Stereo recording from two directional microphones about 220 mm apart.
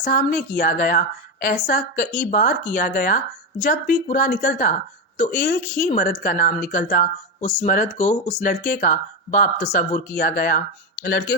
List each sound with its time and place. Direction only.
0.0 s speech: 35° left (ahead or behind)